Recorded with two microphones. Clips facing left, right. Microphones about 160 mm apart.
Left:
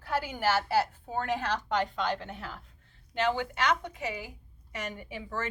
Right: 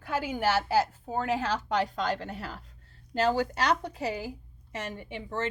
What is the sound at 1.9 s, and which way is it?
A woman's voice, 40° right (ahead or behind).